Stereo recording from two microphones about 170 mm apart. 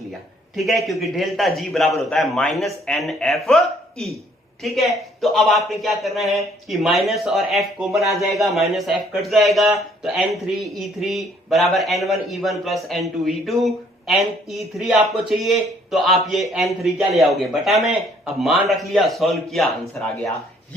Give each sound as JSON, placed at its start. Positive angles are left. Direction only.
{"t": 0.5, "sound": "a man's voice", "side_deg": 0}